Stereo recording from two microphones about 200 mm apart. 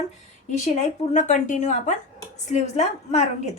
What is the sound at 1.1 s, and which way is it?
A woman's voice, 40° left (ahead or behind).